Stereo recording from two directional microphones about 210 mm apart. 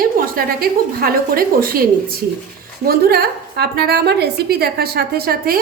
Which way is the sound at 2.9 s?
45° right (ahead or behind).